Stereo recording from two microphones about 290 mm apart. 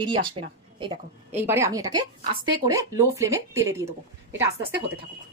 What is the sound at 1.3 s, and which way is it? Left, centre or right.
Speech, centre.